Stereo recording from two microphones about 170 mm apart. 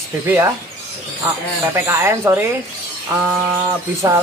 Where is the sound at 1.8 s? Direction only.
15° right (ahead or behind).